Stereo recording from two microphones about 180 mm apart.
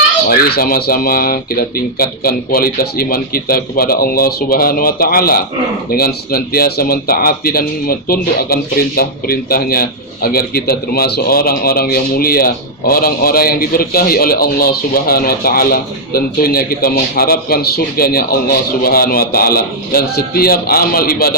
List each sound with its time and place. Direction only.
0.3 s a man's voice: 55° left (ahead or behind)